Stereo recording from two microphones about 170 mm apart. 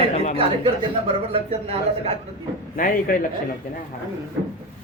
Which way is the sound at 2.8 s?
55° left (ahead or behind).